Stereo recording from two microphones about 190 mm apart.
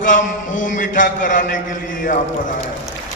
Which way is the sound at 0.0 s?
45° left (ahead or behind).